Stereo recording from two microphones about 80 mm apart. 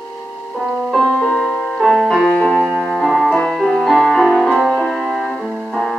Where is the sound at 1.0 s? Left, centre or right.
Centre.